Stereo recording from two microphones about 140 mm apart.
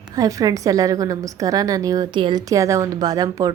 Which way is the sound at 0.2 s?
25° right (ahead or behind).